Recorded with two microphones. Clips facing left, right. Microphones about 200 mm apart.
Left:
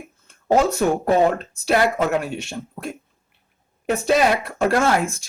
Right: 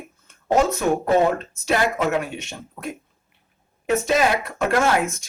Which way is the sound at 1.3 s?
35° left (ahead or behind).